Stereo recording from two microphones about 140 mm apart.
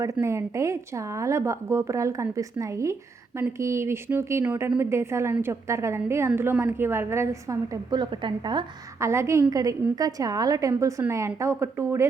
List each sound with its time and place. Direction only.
0.0 s a woman's voice: 20° right (ahead or behind)
9.0 s a woman's voice: 20° right (ahead or behind)